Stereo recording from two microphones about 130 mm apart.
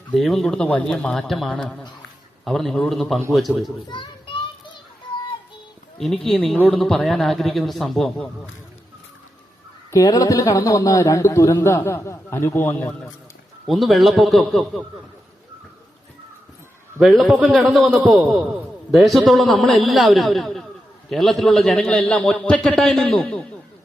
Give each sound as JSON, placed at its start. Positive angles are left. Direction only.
{"t": 0.1, "sound": "a man's voice", "side_deg": 0}
{"t": 3.8, "sound": "children playing", "side_deg": 35}
{"t": 6.2, "sound": "a man's voice", "side_deg": 0}
{"t": 9.9, "sound": "a man's voice", "side_deg": 25}
{"t": 17.0, "sound": "a man's voice", "side_deg": -5}